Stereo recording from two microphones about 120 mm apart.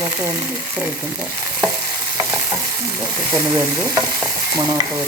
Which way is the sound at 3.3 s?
20° right (ahead or behind).